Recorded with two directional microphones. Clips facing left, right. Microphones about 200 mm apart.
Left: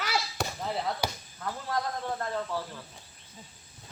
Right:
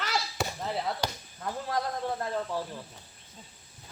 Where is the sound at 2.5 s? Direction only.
15° right (ahead or behind).